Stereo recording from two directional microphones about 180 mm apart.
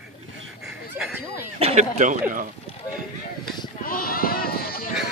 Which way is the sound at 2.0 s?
45° right (ahead or behind).